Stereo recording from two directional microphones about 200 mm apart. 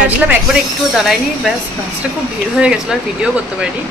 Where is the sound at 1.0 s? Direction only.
Centre (ahead or behind).